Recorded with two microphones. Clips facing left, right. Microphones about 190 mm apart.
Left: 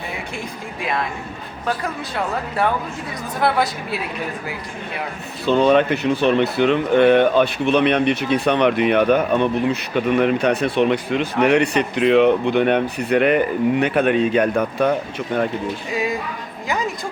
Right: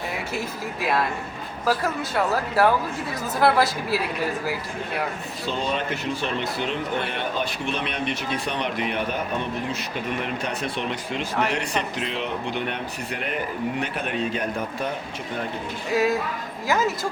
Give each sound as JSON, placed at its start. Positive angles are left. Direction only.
{"t": 0.3, "sound": "speech", "side_deg": -5}
{"t": 5.5, "sound": "speech", "side_deg": 65}
{"t": 15.9, "sound": "speech", "side_deg": 0}